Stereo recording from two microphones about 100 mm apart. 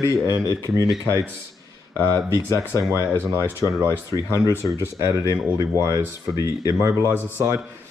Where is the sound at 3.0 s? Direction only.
25° right (ahead or behind).